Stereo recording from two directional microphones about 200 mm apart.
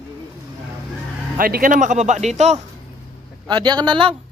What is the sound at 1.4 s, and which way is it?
Speech, 45° right (ahead or behind).